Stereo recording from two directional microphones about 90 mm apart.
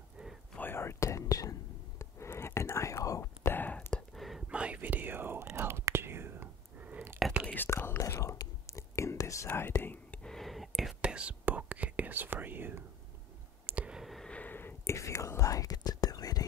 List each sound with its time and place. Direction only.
0.2 s a sound: 10° right (ahead or behind)
0.6 s whispering: 25° left (ahead or behind)
3.5 s whispering: 20° left (ahead or behind)
4.1 s whispering: centre (ahead or behind)
4.5 s whispering: 10° right (ahead or behind)
7.4 s whispering: 20° left (ahead or behind)
9.8 s whispering: 20° left (ahead or behind)
10.2 s whispering: 5° left (ahead or behind)
11.0 s whispering: 15° right (ahead or behind)
13.7 s clicking: 15° right (ahead or behind)
14.3 s a sound: 20° left (ahead or behind)
15.0 s whispering: 35° left (ahead or behind)